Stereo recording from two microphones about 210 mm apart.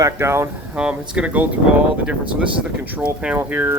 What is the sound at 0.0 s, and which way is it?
Speech, 10° right (ahead or behind).